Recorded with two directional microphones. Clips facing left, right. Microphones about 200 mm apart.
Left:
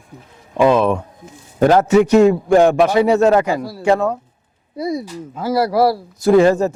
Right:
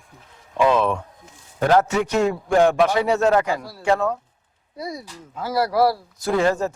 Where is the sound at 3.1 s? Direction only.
20° left (ahead or behind).